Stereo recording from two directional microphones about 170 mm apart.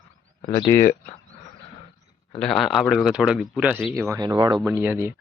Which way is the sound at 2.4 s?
Centre (ahead or behind).